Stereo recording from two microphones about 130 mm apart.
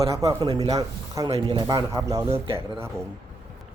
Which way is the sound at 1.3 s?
45° right (ahead or behind).